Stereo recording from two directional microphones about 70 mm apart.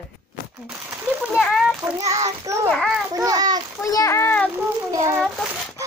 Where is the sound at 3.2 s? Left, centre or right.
Right.